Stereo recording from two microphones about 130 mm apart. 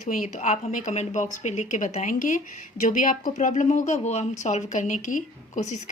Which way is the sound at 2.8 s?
90° left.